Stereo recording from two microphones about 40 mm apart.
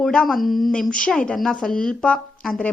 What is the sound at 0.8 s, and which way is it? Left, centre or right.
Speech, centre.